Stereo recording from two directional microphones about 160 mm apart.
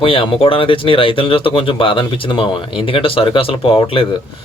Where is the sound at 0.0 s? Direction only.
35° left (ahead or behind).